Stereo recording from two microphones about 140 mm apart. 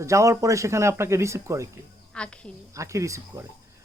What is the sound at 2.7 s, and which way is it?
Speech, 20° right (ahead or behind).